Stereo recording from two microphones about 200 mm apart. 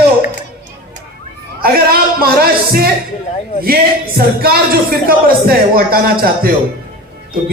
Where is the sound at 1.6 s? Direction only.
50° right (ahead or behind).